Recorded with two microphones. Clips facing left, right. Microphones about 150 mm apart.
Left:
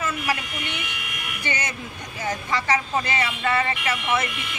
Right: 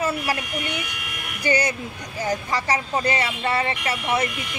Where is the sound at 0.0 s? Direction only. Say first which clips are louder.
Right 2 dB; 40° right (ahead or behind).